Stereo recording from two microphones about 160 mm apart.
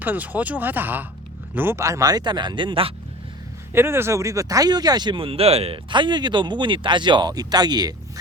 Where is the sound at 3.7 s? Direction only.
15° right (ahead or behind).